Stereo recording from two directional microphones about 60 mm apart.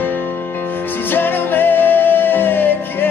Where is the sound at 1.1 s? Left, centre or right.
Left.